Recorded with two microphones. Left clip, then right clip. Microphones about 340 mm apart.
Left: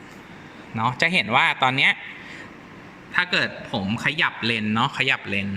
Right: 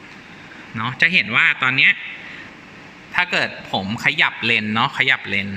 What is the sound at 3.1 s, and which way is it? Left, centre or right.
A man's voice, centre.